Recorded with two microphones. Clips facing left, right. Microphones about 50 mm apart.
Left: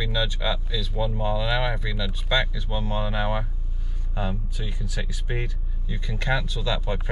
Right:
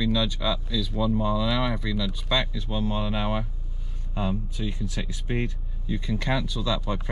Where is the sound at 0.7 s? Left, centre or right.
Centre.